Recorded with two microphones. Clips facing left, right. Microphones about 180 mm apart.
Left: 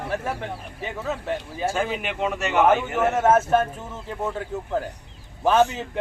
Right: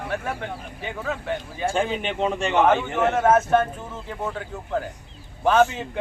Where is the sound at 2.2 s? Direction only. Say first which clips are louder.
Right 1 dB; 30° right (ahead or behind).